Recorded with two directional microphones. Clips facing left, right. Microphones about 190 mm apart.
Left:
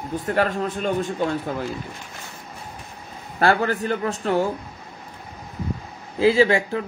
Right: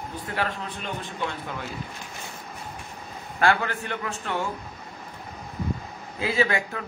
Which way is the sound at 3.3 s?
40° left (ahead or behind).